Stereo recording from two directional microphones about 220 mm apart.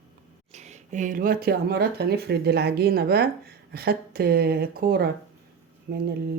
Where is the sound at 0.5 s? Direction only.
30° right (ahead or behind).